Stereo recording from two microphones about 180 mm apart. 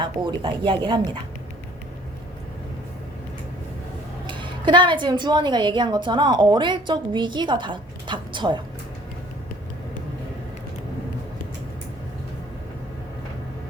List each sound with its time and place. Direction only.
0.0 s a woman's voice: 25° right (ahead or behind)
4.3 s a woman's voice: 25° right (ahead or behind)